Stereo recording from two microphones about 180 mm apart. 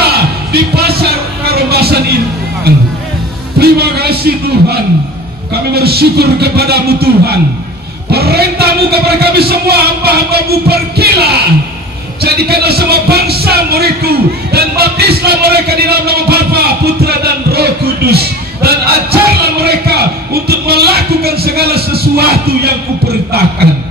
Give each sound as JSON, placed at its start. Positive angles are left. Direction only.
{"t": 0.0, "sound": "a sound", "side_deg": -60}
{"t": 2.7, "sound": "music", "side_deg": -60}
{"t": 5.5, "sound": "speech", "side_deg": -60}